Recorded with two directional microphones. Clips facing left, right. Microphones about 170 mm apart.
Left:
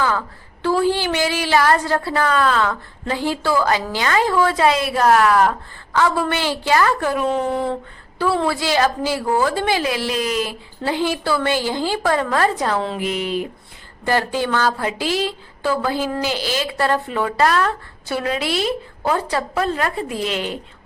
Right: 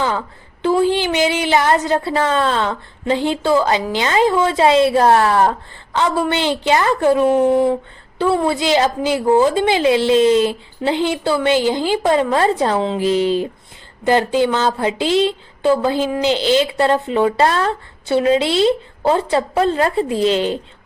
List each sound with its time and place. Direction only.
0.6 s a woman's voice: 20° right (ahead or behind)
7.3 s a woman's voice: 15° right (ahead or behind); by 13.5 s 30° right (ahead or behind)
14.0 s a woman's voice: 20° right (ahead or behind)